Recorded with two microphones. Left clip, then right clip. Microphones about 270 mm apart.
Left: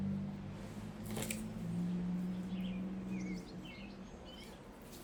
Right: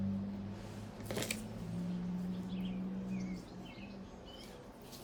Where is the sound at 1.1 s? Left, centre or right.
Right.